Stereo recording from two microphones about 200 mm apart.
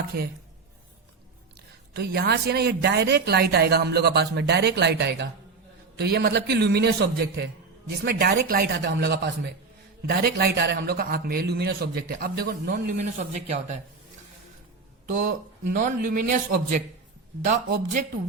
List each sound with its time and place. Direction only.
0.1 s a man's voice: 50° right (ahead or behind)
1.9 s a woman's voice: 55° right (ahead or behind)
13.1 s a man's voice: 35° right (ahead or behind)
15.8 s a man's voice: 40° right (ahead or behind)